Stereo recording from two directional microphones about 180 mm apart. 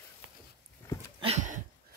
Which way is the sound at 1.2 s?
40° right (ahead or behind).